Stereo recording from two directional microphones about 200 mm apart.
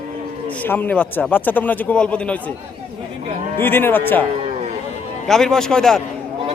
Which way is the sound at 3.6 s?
10° left (ahead or behind).